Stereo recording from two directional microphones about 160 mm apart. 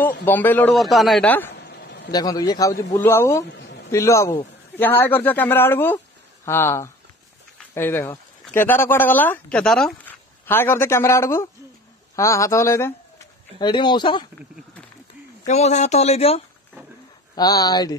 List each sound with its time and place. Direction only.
0.0 s a man's voice: 10° left (ahead or behind)
1.6 s a sound: 90° left
2.0 s a man's voice: 25° left (ahead or behind)
15.4 s speech: 45° left (ahead or behind)
17.4 s a man's voice: 25° left (ahead or behind)